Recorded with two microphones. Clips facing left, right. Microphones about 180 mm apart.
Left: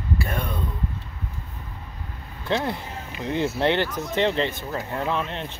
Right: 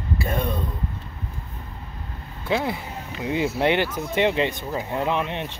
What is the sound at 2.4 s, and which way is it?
Speech, 5° right (ahead or behind).